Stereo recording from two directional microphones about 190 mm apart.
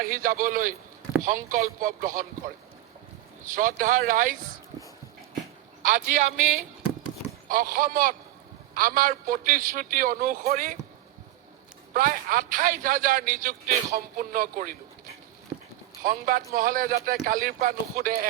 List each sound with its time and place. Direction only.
0.0 s a man's voice: 50° right (ahead or behind)
3.4 s a man's voice: 45° right (ahead or behind)
5.8 s a man's voice: 45° right (ahead or behind)
7.4 s a man's voice: 45° right (ahead or behind)
11.9 s a man's voice: 45° right (ahead or behind)
15.5 s a sound: 5° right (ahead or behind)
16.0 s a man's voice: 50° right (ahead or behind)